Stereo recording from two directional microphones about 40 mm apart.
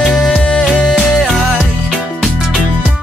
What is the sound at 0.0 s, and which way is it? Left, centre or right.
Music, left.